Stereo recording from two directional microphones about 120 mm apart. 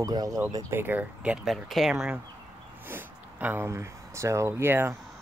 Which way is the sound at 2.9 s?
15° right (ahead or behind).